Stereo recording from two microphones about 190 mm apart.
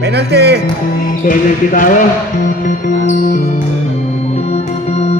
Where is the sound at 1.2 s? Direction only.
45° left (ahead or behind).